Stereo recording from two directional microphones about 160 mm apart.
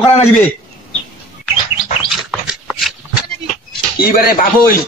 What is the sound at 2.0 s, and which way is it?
Dog, centre (ahead or behind).